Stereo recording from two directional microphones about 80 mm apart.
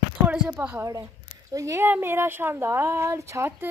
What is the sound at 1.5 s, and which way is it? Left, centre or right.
Speech, right.